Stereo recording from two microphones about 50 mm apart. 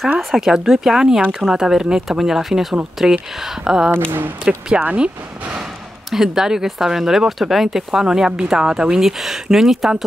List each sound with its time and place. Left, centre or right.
0.2 s speech: centre
6.0 s speech: centre